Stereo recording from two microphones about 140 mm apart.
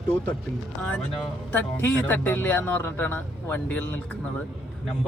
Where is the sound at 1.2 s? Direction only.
10° left (ahead or behind).